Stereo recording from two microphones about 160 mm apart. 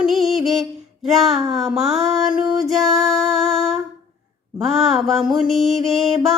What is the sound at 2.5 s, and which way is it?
Music, centre (ahead or behind).